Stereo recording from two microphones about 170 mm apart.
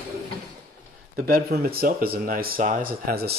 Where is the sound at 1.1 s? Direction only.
60° right (ahead or behind).